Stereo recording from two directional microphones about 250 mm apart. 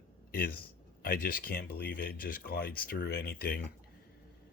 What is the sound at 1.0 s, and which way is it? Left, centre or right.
Speech, left.